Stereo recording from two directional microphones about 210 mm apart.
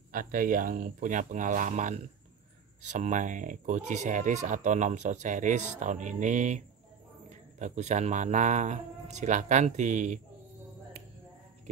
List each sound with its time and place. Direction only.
0.1 s speech: 40° right (ahead or behind)